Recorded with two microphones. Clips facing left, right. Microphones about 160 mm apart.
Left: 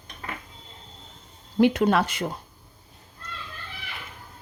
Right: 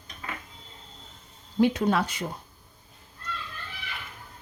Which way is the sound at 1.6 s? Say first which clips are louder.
Left 3 dB; 65° left (ahead or behind).